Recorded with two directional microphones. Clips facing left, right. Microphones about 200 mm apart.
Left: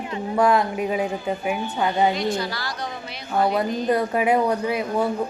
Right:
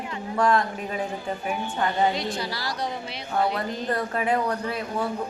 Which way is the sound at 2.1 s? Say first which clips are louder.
Left 5 dB; 35° right (ahead or behind).